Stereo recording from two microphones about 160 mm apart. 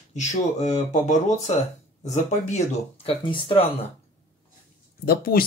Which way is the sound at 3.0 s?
30° left (ahead or behind).